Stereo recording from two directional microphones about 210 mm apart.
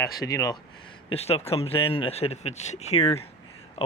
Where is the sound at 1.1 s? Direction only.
30° left (ahead or behind).